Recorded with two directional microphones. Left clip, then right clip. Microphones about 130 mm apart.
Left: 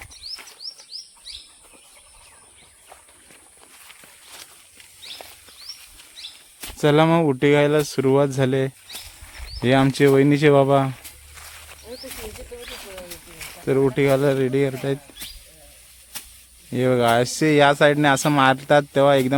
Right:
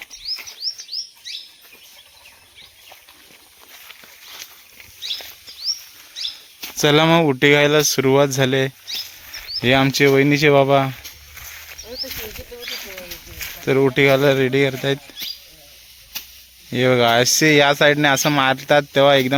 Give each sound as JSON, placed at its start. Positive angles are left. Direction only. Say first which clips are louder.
{"t": 6.7, "sound": "speech", "louder": "right 3 dB", "side_deg": 5}
{"t": 9.3, "sound": "cricket", "louder": "right 10 dB", "side_deg": 5}
{"t": 9.6, "sound": "speech", "louder": "right 2 dB", "side_deg": 15}
{"t": 11.5, "sound": "a sound", "louder": "right 7 dB", "side_deg": 0}
{"t": 12.1, "sound": "snake", "louder": "right 4 dB", "side_deg": 5}
{"t": 12.6, "sound": "a sound", "louder": "right 9 dB", "side_deg": -5}
{"t": 13.4, "sound": "speech", "louder": "right 3 dB", "side_deg": 5}
{"t": 16.6, "sound": "speech", "louder": "right 3 dB", "side_deg": 0}